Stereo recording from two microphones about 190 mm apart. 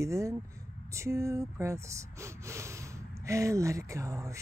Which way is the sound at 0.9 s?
15° right (ahead or behind).